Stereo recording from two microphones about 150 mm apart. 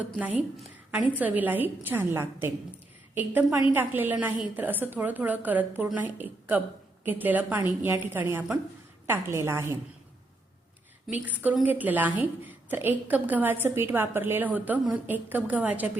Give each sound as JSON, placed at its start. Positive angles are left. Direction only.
{"t": 0.0, "sound": "a woman's voice", "side_deg": -10}
{"t": 3.6, "sound": "a woman's voice", "side_deg": -15}
{"t": 11.1, "sound": "a woman's voice", "side_deg": -10}